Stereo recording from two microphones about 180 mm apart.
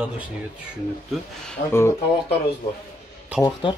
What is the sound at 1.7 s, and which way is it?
Speech, 15° left (ahead or behind).